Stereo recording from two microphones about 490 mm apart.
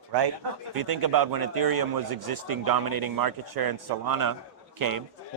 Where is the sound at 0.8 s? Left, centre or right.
Right.